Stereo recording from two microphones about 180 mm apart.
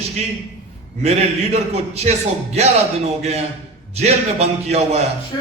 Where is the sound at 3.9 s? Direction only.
35° right (ahead or behind).